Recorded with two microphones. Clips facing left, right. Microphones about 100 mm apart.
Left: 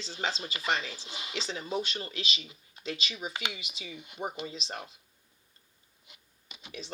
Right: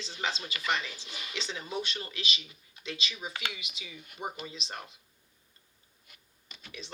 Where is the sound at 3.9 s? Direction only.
20° left (ahead or behind).